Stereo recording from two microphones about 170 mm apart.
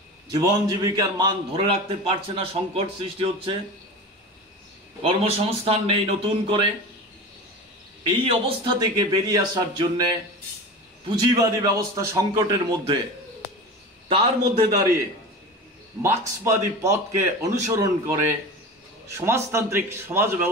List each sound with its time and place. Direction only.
0.3 s a man's voice: 20° right (ahead or behind)
5.0 s a man's voice: 35° right (ahead or behind)
8.3 s a man's voice: 30° right (ahead or behind)
11.1 s a man's voice: 20° right (ahead or behind)
14.0 s a man's voice: 35° right (ahead or behind)
16.0 s a man's voice: 15° right (ahead or behind)
19.1 s a man's voice: 15° right (ahead or behind)